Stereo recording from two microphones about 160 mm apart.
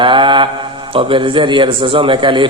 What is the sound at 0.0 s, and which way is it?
A man's voice, 30° right (ahead or behind).